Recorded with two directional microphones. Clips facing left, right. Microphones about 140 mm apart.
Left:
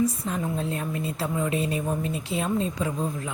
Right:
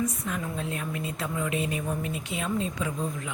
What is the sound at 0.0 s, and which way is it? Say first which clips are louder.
A woman's voice: left 5 dB; 30° left (ahead or behind).